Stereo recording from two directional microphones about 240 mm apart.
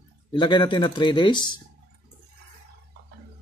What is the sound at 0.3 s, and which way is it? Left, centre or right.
Speech, centre.